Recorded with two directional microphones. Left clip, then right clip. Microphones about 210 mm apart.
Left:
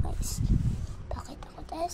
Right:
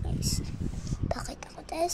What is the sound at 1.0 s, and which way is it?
Whispering, 25° right (ahead or behind).